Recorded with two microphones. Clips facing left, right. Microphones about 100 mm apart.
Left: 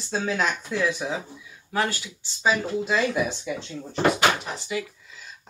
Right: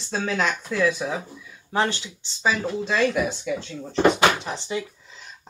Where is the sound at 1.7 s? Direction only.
25° right (ahead or behind).